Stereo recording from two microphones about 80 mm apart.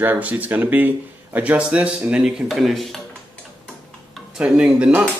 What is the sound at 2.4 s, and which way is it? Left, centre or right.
Speech, centre.